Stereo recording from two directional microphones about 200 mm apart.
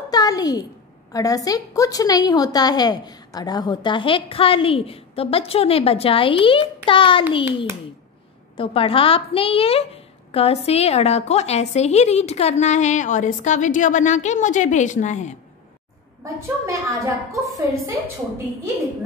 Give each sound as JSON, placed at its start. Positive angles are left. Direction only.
{"t": 0.1, "sound": "a sound", "side_deg": 20}
{"t": 1.1, "sound": "a woman's voice", "side_deg": 15}
{"t": 8.5, "sound": "a woman's voice", "side_deg": 25}
{"t": 16.3, "sound": "a woman's voice", "side_deg": -15}